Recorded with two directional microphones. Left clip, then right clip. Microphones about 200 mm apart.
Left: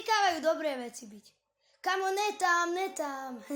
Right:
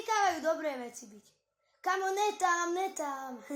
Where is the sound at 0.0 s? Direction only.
30° left (ahead or behind).